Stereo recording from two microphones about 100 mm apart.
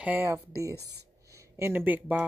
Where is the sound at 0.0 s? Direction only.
20° right (ahead or behind).